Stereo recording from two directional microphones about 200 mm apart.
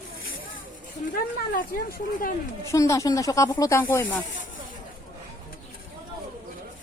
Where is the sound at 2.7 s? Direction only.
15° left (ahead or behind).